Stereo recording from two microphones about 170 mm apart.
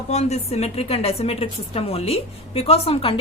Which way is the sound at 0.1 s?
40° left (ahead or behind).